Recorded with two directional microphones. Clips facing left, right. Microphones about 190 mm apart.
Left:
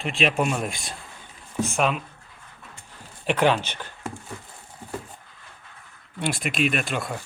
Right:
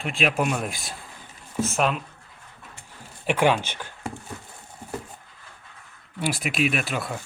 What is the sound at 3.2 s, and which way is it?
Speech, 10° right (ahead or behind).